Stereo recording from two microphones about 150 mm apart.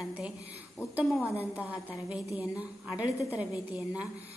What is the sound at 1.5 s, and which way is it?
A woman's voice, 10° right (ahead or behind).